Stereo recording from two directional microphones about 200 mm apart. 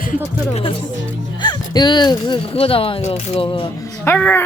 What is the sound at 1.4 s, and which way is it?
Speech, 20° left (ahead or behind).